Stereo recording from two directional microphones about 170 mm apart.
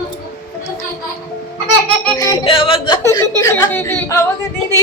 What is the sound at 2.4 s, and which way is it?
Speech, 30° left (ahead or behind).